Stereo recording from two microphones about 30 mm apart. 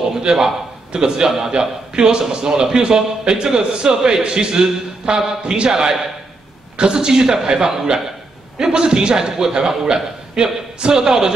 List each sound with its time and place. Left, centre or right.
0.3 s a man's voice: right
6.8 s a man's voice: right